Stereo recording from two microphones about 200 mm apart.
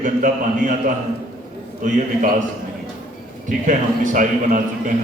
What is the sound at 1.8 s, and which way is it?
Speech, 40° right (ahead or behind).